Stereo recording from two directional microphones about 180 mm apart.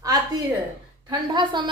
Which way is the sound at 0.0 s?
20° right (ahead or behind).